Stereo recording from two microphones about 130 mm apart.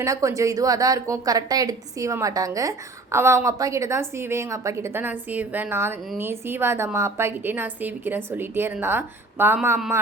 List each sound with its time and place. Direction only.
0.0 s a woman's voice: 25° right (ahead or behind)